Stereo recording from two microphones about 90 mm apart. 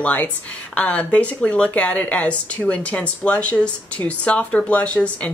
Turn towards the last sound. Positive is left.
turn(degrees=15)  # may be behind; listen again after turning